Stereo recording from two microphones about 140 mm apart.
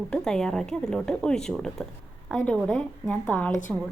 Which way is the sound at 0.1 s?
5° left (ahead or behind).